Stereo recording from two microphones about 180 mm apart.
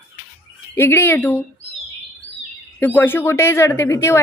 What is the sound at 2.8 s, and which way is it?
Speech, 10° left (ahead or behind).